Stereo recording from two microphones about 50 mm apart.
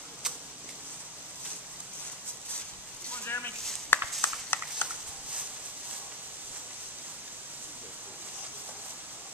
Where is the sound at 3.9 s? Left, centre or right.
Left.